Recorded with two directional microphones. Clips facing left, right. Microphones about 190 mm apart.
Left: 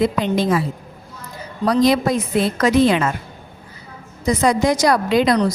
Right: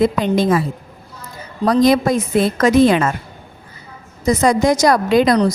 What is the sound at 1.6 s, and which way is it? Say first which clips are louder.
A woman's voice: right 2 dB; 45° right (ahead or behind).